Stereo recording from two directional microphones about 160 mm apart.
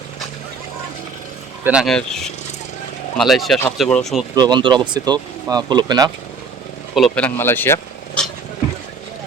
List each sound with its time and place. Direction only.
1.6 s speech: 5° right (ahead or behind)
4.4 s speech: 25° right (ahead or behind)
6.9 s speech: centre (ahead or behind)
7.3 s speech: 15° left (ahead or behind)